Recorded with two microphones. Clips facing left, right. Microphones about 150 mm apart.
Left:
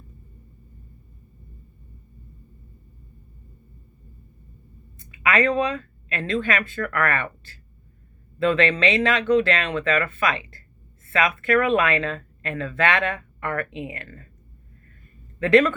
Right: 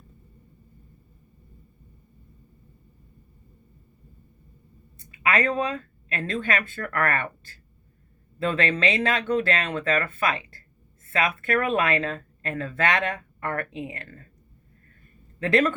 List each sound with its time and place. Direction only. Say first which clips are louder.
5.1 s speech: left 3 dB; 35° right (ahead or behind)